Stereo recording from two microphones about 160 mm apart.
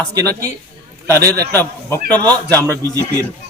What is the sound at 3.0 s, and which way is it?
Speech, 15° left (ahead or behind).